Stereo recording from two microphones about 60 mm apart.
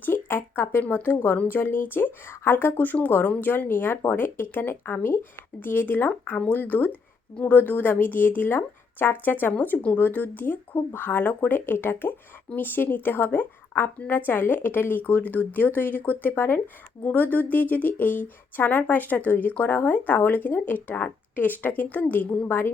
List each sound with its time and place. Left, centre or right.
0.0 s speech: left
22.4 s speech: left